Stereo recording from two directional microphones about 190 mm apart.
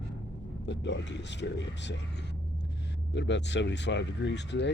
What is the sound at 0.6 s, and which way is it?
Speech, 70° left (ahead or behind).